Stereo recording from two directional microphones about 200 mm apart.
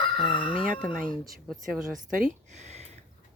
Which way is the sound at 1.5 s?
Centre (ahead or behind).